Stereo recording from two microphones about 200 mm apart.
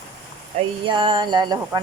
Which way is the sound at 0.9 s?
25° right (ahead or behind).